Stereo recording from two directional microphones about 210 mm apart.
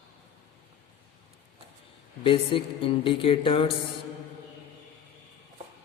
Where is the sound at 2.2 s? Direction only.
25° left (ahead or behind).